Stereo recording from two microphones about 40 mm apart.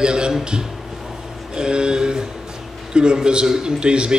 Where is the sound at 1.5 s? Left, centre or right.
Right.